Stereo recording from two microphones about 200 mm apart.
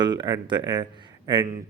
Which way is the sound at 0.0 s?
20° right (ahead or behind).